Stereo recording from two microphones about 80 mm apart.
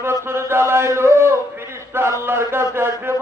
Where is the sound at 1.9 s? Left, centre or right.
Right.